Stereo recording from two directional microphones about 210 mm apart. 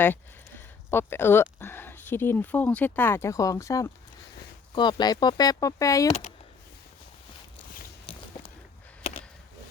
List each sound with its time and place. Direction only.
0.0 s speech: 10° left (ahead or behind)
8.1 s walk: 25° left (ahead or behind)